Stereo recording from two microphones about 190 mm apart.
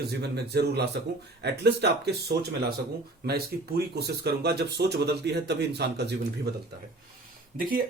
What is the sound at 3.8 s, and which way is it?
Speech, 55° right (ahead or behind).